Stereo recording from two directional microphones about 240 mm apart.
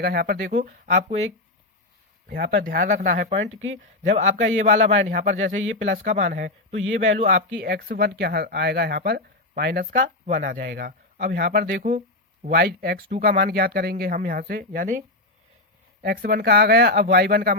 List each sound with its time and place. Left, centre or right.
0.0 s speech: right
2.2 s speech: right